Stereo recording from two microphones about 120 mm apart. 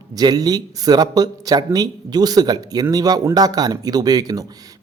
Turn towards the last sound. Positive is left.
turn(degrees=-30)  # may be behind; listen again after turning